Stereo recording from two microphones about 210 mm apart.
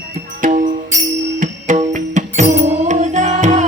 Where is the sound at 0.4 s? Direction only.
40° right (ahead or behind).